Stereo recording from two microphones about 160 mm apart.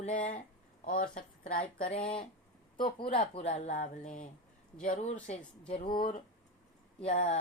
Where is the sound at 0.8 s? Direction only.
60° left (ahead or behind).